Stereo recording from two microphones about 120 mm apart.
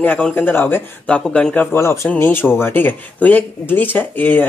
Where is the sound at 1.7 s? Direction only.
20° left (ahead or behind).